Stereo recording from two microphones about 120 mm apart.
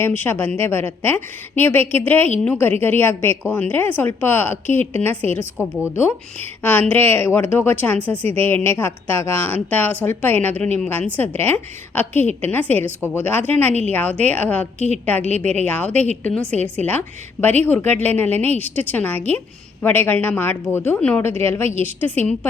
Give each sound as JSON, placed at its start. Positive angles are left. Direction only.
{"t": 0.0, "sound": "a woman's voice", "side_deg": 15}